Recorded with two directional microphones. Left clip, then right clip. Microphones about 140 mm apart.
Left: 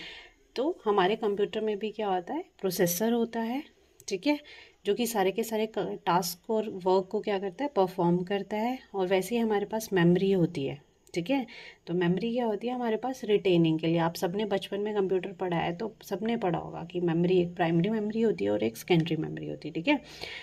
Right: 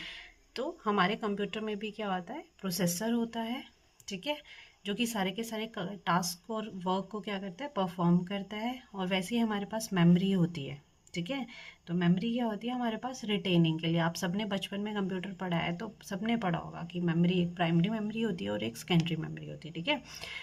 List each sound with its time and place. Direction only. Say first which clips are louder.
0.5 s speech: left 5 dB; 35° left (ahead or behind)
3.0 s speech: left 5 dB; 50° left (ahead or behind); by 16.8 s 25° left (ahead or behind)
16.8 s speech: left 6 dB; 35° left (ahead or behind)